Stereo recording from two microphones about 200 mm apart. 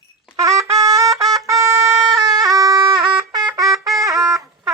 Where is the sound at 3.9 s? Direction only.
15° right (ahead or behind).